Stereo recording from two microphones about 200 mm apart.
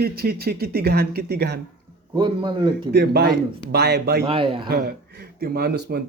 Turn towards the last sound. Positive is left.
turn(degrees=-55)  # may be behind; listen again after turning